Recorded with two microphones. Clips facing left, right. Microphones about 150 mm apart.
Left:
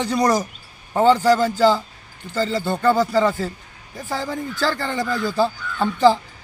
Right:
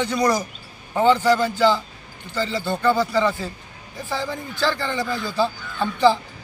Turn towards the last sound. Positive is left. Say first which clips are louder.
# left 2 dB
turn(degrees=40)  # may be behind; listen again after turning